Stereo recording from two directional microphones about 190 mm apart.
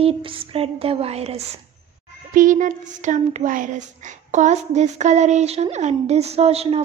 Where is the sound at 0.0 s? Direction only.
30° right (ahead or behind).